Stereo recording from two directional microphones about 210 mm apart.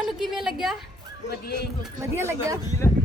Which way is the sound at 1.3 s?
50° left (ahead or behind).